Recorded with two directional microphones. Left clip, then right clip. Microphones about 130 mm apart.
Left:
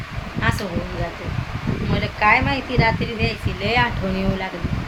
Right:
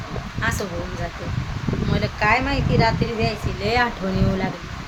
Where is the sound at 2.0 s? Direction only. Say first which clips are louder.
Left 3 dB; 15° right (ahead or behind).